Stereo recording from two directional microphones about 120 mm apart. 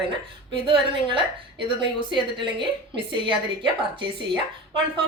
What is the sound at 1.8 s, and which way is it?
A woman's voice, 40° right (ahead or behind).